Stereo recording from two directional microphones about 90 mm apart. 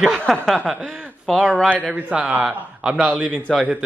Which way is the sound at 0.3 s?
Centre (ahead or behind).